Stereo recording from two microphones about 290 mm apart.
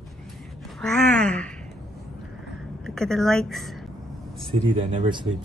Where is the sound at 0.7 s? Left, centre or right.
Centre.